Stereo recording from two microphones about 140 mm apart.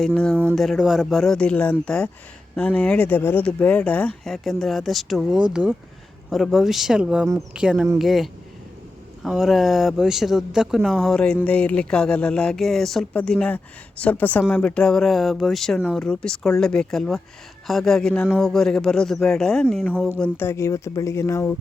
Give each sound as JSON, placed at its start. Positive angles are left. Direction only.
{"t": 0.5, "sound": "speech", "side_deg": 0}